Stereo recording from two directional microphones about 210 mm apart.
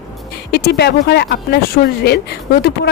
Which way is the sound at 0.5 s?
50° left (ahead or behind).